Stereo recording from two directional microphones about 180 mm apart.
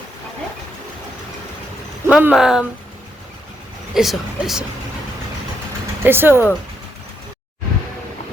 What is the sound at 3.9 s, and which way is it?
Speech, centre (ahead or behind).